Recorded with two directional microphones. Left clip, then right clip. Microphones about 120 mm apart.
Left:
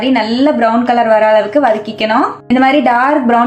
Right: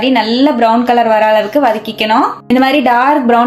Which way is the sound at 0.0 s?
20° right (ahead or behind).